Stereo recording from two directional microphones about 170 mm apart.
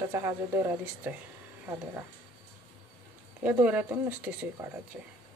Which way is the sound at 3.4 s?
10° right (ahead or behind).